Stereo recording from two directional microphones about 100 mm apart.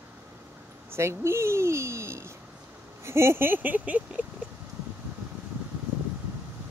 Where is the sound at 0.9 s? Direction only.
25° right (ahead or behind).